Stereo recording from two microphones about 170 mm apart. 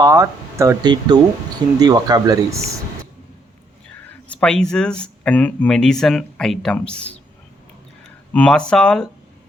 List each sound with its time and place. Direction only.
0.0 s speech: 15° right (ahead or behind)
4.4 s speech: 5° left (ahead or behind)
8.3 s speech: 5° left (ahead or behind)